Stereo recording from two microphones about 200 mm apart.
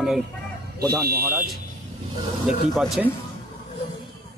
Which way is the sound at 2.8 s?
Centre (ahead or behind).